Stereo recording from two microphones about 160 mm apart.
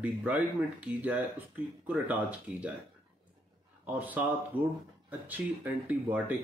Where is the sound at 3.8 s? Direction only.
10° right (ahead or behind).